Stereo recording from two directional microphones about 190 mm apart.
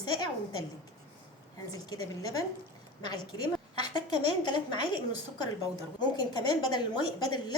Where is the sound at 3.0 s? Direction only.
20° left (ahead or behind).